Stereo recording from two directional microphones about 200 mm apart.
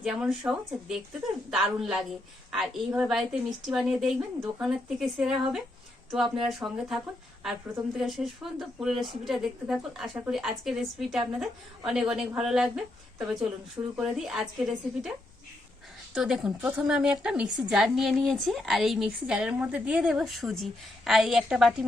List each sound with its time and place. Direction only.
0.0 s a woman's voice: 5° right (ahead or behind)
16.1 s a woman's voice: 5° right (ahead or behind)